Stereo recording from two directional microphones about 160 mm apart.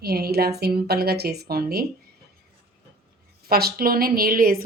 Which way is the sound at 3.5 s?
75° right (ahead or behind).